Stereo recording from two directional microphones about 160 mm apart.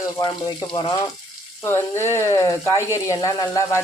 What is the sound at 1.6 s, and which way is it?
Speech, 15° left (ahead or behind).